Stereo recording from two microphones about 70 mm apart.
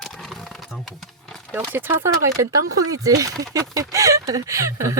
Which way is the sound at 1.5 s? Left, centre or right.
Right.